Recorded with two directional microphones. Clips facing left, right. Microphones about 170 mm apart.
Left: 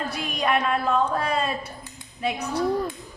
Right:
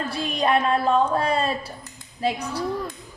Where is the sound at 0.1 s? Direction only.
30° right (ahead or behind).